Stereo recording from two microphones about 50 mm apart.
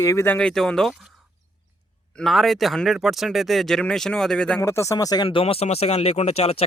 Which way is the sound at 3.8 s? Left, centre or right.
Centre.